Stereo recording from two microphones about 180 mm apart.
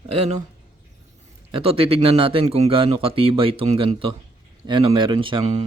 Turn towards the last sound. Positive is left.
turn(degrees=-30)  # may be behind; listen again after turning